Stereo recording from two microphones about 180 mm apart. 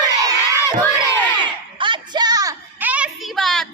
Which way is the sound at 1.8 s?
25° right (ahead or behind).